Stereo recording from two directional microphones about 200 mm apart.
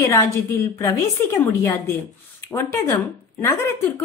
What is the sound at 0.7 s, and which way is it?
Speech, 15° left (ahead or behind).